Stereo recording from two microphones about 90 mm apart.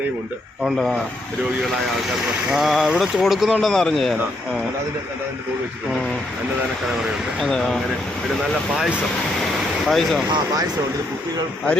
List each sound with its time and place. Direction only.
0.6 s speech: 5° right (ahead or behind)
2.5 s speech: 5° right (ahead or behind)
9.8 s speech: centre (ahead or behind)
10.2 s speech: 50° right (ahead or behind)